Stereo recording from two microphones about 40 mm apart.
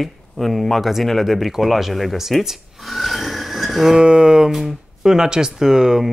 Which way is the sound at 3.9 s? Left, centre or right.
Right.